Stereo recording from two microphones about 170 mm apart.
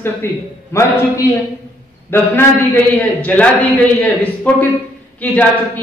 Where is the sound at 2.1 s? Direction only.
10° left (ahead or behind).